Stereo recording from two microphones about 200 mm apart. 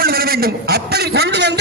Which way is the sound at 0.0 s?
50° right (ahead or behind).